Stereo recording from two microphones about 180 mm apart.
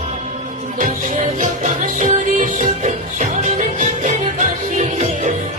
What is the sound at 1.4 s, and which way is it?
Music, 45° right (ahead or behind).